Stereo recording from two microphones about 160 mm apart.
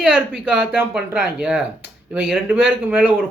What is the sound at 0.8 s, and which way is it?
Speech, 10° right (ahead or behind).